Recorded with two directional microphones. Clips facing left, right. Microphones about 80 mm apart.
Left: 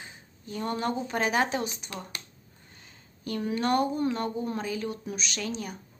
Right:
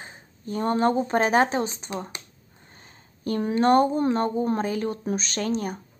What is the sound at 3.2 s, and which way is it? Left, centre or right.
Speech, right.